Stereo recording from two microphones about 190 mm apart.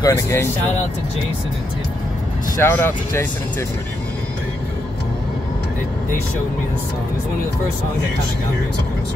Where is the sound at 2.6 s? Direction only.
10° left (ahead or behind).